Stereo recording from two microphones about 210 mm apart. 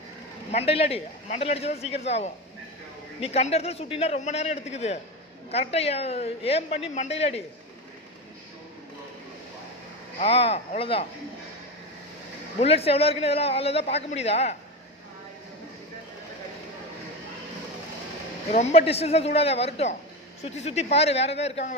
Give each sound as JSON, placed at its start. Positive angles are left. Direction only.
{"t": 0.5, "sound": "a man's voice", "side_deg": 30}
{"t": 10.2, "sound": "a man's voice", "side_deg": 30}
{"t": 12.5, "sound": "a man's voice", "side_deg": 30}
{"t": 18.5, "sound": "a man's voice", "side_deg": 30}